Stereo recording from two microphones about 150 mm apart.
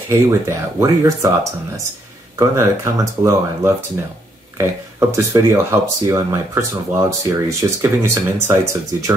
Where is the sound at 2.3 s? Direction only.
20° right (ahead or behind).